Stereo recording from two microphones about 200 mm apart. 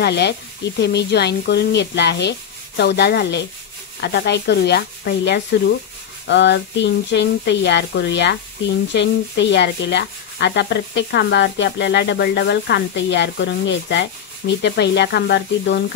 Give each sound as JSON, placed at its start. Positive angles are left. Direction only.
{"t": 0.0, "sound": "speech", "side_deg": 55}